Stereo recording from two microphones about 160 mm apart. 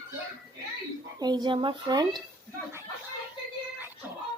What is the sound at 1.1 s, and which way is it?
Speech, 25° right (ahead or behind).